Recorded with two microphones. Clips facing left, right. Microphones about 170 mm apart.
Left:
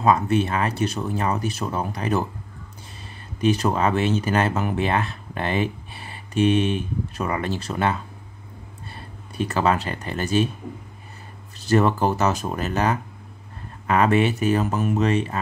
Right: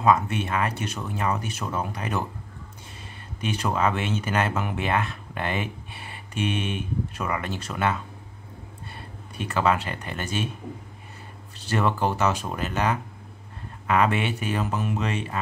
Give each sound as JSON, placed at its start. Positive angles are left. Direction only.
{"t": 0.0, "sound": "speech", "side_deg": 35}
{"t": 3.3, "sound": "speech", "side_deg": 35}
{"t": 9.4, "sound": "speech", "side_deg": 35}
{"t": 11.7, "sound": "speech", "side_deg": 40}